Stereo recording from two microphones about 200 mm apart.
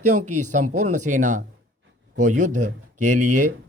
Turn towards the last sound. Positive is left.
turn(degrees=-40)  # may be behind; listen again after turning